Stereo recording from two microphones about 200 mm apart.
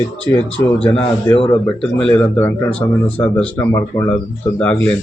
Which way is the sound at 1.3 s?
25° left (ahead or behind).